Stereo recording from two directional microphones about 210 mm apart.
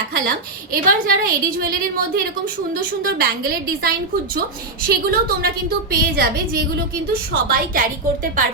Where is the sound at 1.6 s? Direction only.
45° right (ahead or behind).